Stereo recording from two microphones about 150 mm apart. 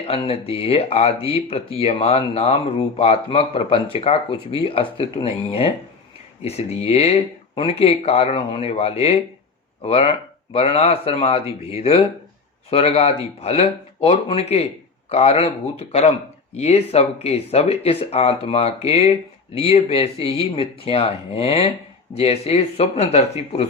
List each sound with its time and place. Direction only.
0.1 s speech: 40° left (ahead or behind)